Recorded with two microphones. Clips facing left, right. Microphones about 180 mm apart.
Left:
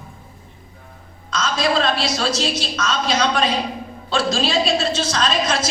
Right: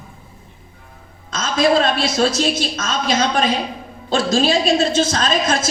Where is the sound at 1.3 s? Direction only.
50° right (ahead or behind).